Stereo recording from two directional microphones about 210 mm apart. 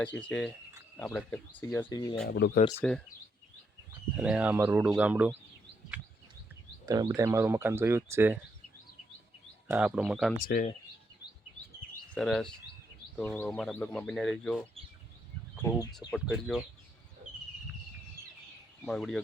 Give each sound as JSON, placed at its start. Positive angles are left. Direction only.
{"t": 0.2, "sound": "speech", "side_deg": 5}
{"t": 1.9, "sound": "speech", "side_deg": 20}
{"t": 2.2, "sound": "speech", "side_deg": 50}
{"t": 2.8, "sound": "speech", "side_deg": 5}
{"t": 4.2, "sound": "speech", "side_deg": -5}
{"t": 6.8, "sound": "speech", "side_deg": -15}
{"t": 9.6, "sound": "speech", "side_deg": -5}
{"t": 10.4, "sound": "speech", "side_deg": 40}
{"t": 12.1, "sound": "speech", "side_deg": 5}
{"t": 15.6, "sound": "speech", "side_deg": 15}
{"t": 16.1, "sound": "speech", "side_deg": -5}
{"t": 18.9, "sound": "speech", "side_deg": 0}